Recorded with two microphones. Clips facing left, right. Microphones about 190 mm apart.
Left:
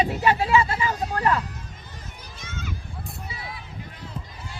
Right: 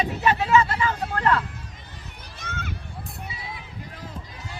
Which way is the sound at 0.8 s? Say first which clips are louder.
Even; 15° left (ahead or behind).